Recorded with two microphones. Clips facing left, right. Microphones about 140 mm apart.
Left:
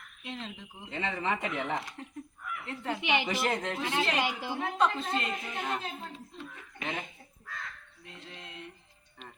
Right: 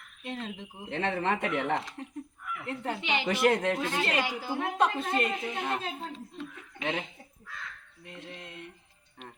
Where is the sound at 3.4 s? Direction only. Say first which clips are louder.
Right 7 dB; 60° right (ahead or behind).